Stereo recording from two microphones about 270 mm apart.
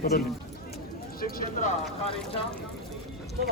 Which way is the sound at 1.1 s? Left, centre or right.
Left.